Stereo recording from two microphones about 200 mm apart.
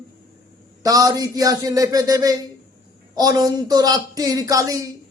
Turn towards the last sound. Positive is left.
turn(degrees=-15)  # may be behind; listen again after turning